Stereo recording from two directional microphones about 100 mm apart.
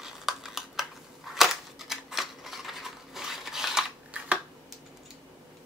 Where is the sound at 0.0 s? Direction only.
5° right (ahead or behind).